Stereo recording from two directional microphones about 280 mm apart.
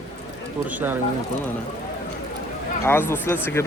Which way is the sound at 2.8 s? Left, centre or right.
Centre.